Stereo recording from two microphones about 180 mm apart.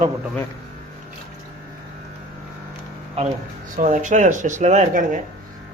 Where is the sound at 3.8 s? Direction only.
45° right (ahead or behind).